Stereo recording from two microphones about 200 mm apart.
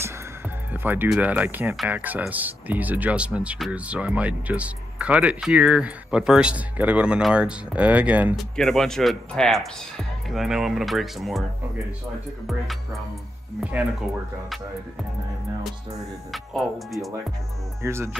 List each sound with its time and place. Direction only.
0.8 s speech: 10° right (ahead or behind)
13.6 s speech: 5° right (ahead or behind)
15.6 s speech: centre (ahead or behind)
17.8 s speech: 15° right (ahead or behind)